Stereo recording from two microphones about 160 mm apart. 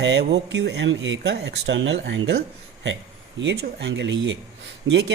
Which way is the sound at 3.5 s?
90° right.